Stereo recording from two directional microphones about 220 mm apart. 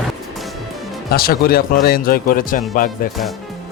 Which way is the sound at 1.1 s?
45° left (ahead or behind).